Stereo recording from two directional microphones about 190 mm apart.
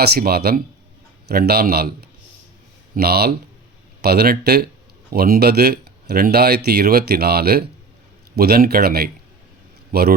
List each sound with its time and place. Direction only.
0.0 s a man's voice: 55° right (ahead or behind)